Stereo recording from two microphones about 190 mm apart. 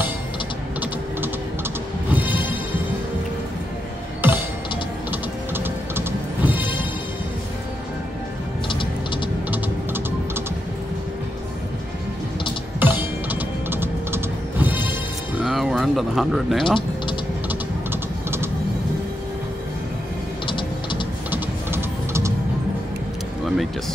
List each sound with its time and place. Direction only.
2.0 s music: 10° right (ahead or behind)
4.2 s music: 10° right (ahead or behind)
8.6 s music: 25° left (ahead or behind)
12.7 s music: 10° right (ahead or behind)
15.4 s a sound: centre (ahead or behind)
20.4 s a sound: 25° left (ahead or behind)
21.3 s music: 15° right (ahead or behind)